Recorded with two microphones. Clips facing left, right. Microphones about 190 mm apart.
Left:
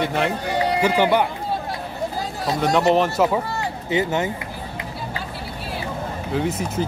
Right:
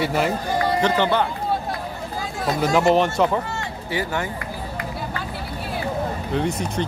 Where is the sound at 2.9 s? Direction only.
5° left (ahead or behind).